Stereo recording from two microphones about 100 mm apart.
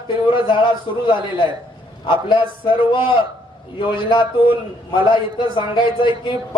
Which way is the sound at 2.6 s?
55° left (ahead or behind).